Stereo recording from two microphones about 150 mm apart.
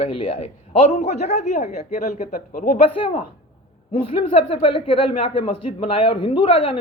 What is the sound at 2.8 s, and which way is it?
Speech, 35° left (ahead or behind).